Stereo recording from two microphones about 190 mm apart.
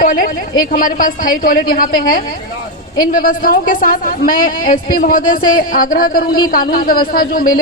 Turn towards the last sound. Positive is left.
turn(degrees=50)  # may be behind; listen again after turning